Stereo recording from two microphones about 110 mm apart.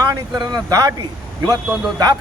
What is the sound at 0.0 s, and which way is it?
Speech, 35° right (ahead or behind).